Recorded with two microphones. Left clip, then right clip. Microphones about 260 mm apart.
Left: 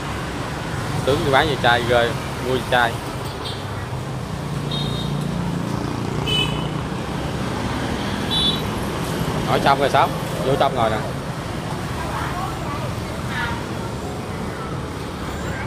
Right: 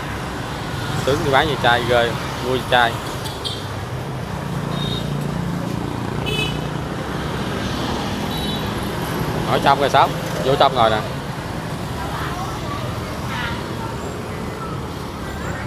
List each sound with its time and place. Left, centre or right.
1.0 s speech: centre
9.5 s speech: centre
10.6 s speech: centre